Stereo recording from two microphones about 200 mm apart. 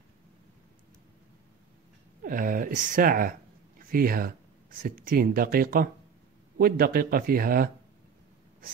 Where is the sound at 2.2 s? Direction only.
40° right (ahead or behind).